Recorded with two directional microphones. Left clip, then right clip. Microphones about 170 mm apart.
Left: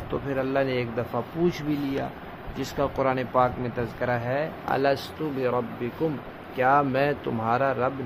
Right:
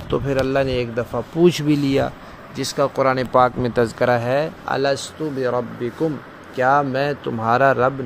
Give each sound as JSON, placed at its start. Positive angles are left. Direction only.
{"t": 0.1, "sound": "a man's voice", "side_deg": -35}
{"t": 1.4, "sound": "speech", "side_deg": -50}
{"t": 2.5, "sound": "a man's voice", "side_deg": -30}
{"t": 3.3, "sound": "speech", "side_deg": -55}
{"t": 4.6, "sound": "speech", "side_deg": -25}
{"t": 7.5, "sound": "speech", "side_deg": -45}